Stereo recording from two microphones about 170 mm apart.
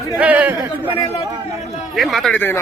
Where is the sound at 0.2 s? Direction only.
10° right (ahead or behind).